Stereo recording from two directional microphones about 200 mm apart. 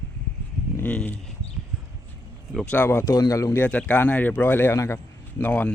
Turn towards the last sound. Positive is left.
turn(degrees=5)  # may be behind; listen again after turning